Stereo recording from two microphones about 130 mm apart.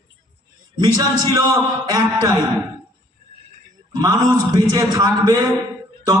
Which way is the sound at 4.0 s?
30° right (ahead or behind).